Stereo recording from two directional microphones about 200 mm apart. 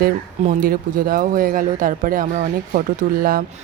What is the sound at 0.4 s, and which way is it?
Speech, 45° right (ahead or behind).